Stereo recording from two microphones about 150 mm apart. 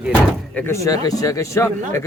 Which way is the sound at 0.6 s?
15° left (ahead or behind).